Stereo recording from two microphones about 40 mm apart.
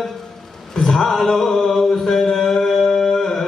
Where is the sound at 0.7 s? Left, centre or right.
Centre.